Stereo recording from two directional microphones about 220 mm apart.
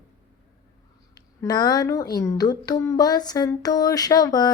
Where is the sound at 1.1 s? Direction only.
15° left (ahead or behind).